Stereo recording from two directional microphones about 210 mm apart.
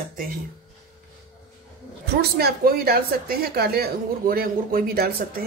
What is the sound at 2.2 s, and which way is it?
Speech, 50° right (ahead or behind).